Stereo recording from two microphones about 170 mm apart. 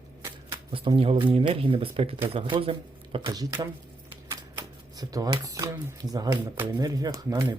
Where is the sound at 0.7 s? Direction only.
30° right (ahead or behind).